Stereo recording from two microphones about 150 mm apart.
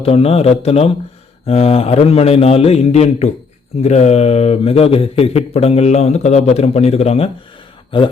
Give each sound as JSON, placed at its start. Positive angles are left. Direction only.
{"t": 0.0, "sound": "a man's voice", "side_deg": 40}